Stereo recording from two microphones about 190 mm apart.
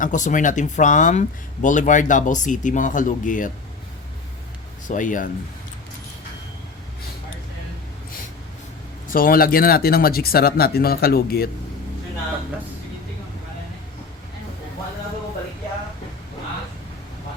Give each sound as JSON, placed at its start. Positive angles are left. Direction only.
{"t": 0.0, "sound": "speech", "side_deg": 40}
{"t": 4.9, "sound": "speech", "side_deg": 45}
{"t": 9.0, "sound": "speech", "side_deg": 50}